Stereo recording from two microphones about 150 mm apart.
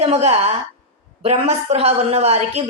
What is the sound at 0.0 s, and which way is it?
A woman's voice, 45° right (ahead or behind).